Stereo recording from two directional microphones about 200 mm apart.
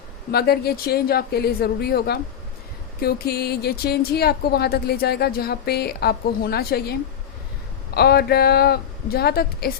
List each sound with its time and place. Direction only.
0.3 s speech: 50° left (ahead or behind)
7.9 s speech: 50° left (ahead or behind)